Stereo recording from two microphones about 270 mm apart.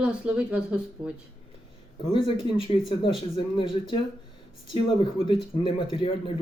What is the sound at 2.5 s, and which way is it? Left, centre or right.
Speech, centre.